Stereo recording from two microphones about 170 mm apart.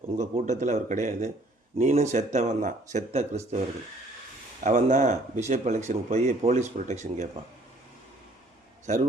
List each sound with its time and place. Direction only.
0.2 s speech: 45° right (ahead or behind)
4.6 s speech: 50° right (ahead or behind)